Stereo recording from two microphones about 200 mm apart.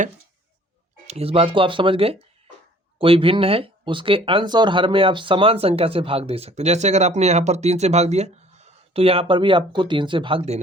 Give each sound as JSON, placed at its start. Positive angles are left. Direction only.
{"t": 1.0, "sound": "speech", "side_deg": -30}